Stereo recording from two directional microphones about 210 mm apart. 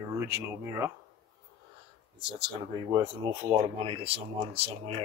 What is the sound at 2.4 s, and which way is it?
Speech, 20° right (ahead or behind).